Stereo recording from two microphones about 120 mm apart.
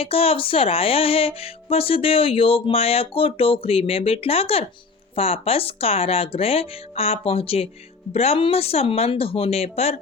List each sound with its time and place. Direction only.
0.0 s speech: 50° left (ahead or behind)